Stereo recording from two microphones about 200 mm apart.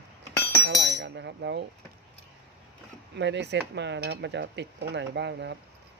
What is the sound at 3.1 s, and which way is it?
Cutlery, 60° right (ahead or behind).